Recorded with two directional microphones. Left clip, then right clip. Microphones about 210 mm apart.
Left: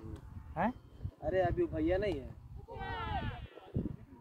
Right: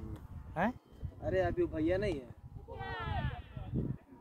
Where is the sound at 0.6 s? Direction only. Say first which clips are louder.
Even; 50° right (ahead or behind).